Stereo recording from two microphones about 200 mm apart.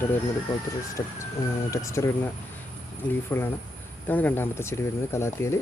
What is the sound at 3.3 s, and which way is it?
Speech, 10° left (ahead or behind).